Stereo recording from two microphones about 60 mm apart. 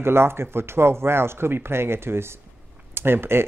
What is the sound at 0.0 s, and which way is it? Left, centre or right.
Speech, right.